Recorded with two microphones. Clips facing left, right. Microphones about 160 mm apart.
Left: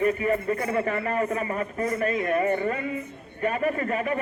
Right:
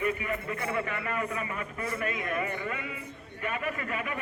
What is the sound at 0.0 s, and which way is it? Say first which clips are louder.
A man's voice: left 8 dB; 40° left (ahead or behind).